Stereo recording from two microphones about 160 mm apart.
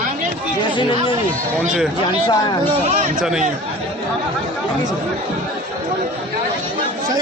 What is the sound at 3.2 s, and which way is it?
Speech, 5° right (ahead or behind).